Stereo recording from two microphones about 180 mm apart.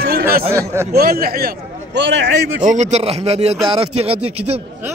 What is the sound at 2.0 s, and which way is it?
Speech, 85° right.